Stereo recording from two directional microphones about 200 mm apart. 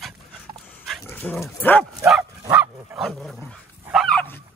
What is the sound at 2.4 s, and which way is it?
Bow-wow, 10° right (ahead or behind).